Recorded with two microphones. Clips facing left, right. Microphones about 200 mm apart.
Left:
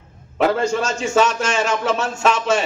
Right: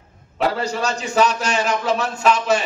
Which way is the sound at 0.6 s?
35° right (ahead or behind).